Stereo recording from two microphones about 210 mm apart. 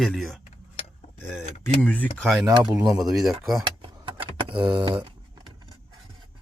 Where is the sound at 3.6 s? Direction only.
25° right (ahead or behind).